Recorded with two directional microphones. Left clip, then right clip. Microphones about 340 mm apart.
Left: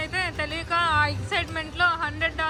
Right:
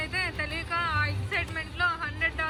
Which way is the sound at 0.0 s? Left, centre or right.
Centre.